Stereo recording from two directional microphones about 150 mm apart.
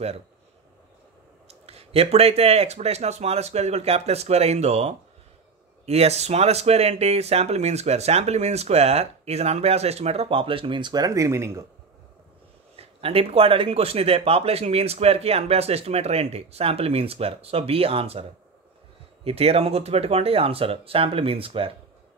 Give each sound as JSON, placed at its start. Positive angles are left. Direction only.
{"t": 1.5, "sound": "speech", "side_deg": -40}
{"t": 12.7, "sound": "speech", "side_deg": -40}
{"t": 19.2, "sound": "speech", "side_deg": -40}